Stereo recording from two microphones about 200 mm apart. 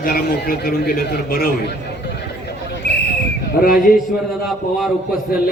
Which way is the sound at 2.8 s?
55° left (ahead or behind).